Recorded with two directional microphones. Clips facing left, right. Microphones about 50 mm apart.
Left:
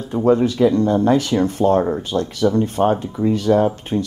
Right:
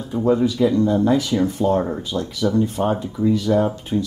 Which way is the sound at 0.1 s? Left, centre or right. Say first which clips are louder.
Left 3 dB; left.